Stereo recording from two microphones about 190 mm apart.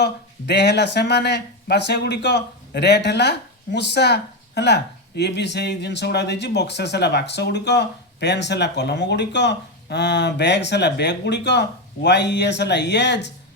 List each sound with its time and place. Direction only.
0.0 s speech: 60° left (ahead or behind)